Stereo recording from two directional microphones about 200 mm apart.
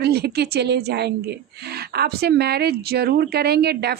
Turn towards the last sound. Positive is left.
turn(degrees=-55)  # may be behind; listen again after turning